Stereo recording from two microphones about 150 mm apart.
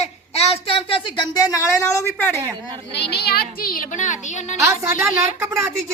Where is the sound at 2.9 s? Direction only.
90° left; by 4.5 s 55° left (ahead or behind).